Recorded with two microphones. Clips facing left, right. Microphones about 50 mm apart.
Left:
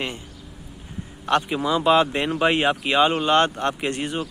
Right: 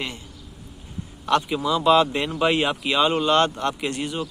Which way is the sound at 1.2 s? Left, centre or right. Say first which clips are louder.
Even; left.